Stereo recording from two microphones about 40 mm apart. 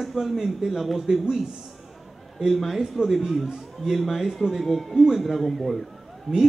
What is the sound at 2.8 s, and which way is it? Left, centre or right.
Speech, centre.